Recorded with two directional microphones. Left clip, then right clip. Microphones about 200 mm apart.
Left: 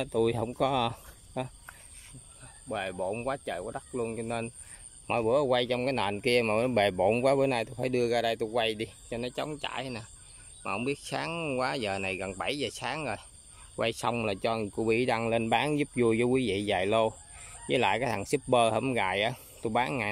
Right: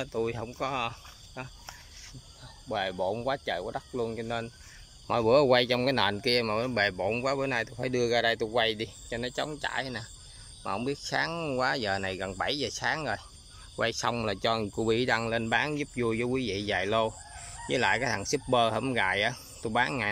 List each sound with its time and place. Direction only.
0.0 s speech: 20° left (ahead or behind)
2.7 s speech: 5° left (ahead or behind)
5.3 s speech: 5° right (ahead or behind); by 20.1 s 15° left (ahead or behind)